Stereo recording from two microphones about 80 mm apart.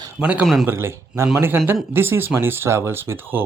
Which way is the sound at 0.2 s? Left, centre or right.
Centre.